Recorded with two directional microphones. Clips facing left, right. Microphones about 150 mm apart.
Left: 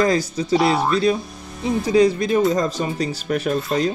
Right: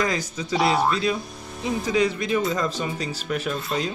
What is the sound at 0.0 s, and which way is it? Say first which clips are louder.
Speech: left 7 dB; 35° left (ahead or behind).